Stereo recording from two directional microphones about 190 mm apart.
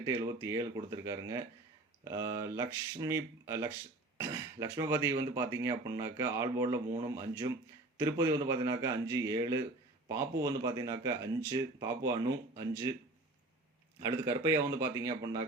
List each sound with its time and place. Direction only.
0.0 s speech: 15° right (ahead or behind)
14.0 s speech: 15° right (ahead or behind)